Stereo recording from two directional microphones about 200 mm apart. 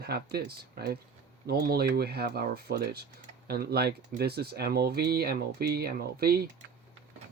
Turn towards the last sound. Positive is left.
turn(degrees=-50)  # may be behind; listen again after turning